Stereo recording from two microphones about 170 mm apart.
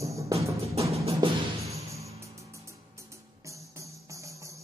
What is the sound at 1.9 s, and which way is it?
Music, 15° right (ahead or behind).